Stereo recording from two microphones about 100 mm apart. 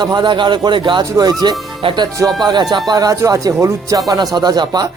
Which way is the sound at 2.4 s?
45° right (ahead or behind).